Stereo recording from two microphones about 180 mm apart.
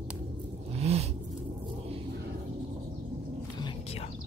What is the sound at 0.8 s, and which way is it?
Vehicle, 35° right (ahead or behind).